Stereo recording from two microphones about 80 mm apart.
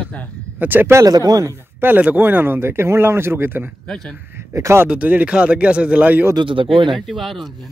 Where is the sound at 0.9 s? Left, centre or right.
Right.